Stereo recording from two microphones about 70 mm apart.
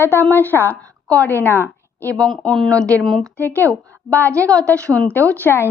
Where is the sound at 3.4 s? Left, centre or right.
Left.